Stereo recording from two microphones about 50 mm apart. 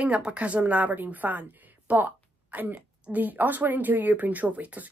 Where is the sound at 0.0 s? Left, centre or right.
Right.